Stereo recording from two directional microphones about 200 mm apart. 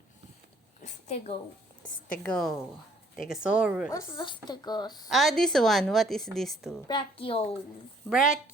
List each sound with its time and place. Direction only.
0.8 s a sound: 35° left (ahead or behind)
2.1 s speech: 5° left (ahead or behind)
3.9 s speech: 20° left (ahead or behind)
5.0 s speech: centre (ahead or behind)
6.8 s speech: 25° left (ahead or behind)
8.1 s speech: 5° right (ahead or behind)